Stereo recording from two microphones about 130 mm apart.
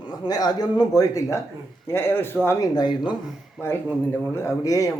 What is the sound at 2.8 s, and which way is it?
Speech, 35° left (ahead or behind).